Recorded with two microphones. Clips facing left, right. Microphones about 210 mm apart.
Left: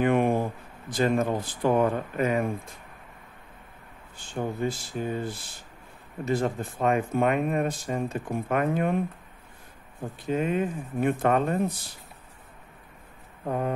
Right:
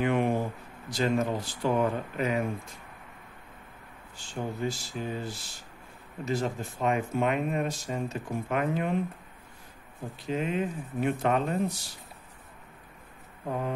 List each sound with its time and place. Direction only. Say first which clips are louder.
0.0 s speech: left 3 dB; 50° left (ahead or behind)
4.3 s speech: left 3 dB; 55° left (ahead or behind)
10.2 s speech: left 3 dB; 50° left (ahead or behind)